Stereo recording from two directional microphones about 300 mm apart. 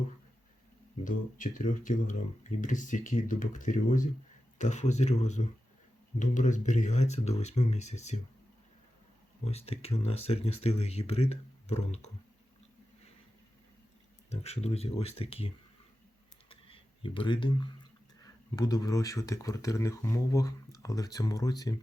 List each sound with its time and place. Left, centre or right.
1.0 s speech: left
9.4 s speech: left
14.3 s speech: left
16.5 s a sound: centre
18.5 s speech: centre